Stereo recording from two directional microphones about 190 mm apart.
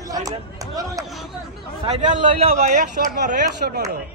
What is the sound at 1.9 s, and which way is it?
A man's voice, 40° right (ahead or behind).